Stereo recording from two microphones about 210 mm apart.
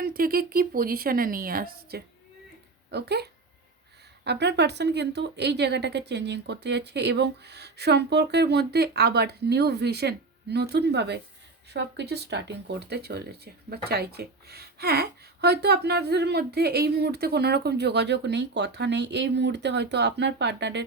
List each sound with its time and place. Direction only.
0.0 s a woman's voice: 45° right (ahead or behind)